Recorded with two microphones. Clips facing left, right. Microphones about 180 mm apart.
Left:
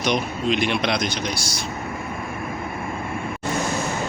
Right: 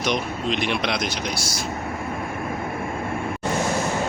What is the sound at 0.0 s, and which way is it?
Speech, centre (ahead or behind).